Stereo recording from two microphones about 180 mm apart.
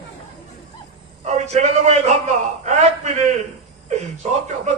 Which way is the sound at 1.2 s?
35° right (ahead or behind).